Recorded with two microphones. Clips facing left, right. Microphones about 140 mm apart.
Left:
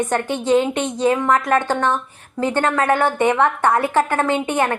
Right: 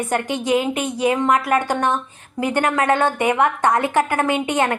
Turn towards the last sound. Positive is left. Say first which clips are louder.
# even
turn(degrees=-15)  # may be behind; listen again after turning